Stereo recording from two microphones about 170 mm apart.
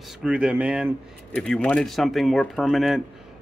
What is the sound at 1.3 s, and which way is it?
Speech, 5° left (ahead or behind).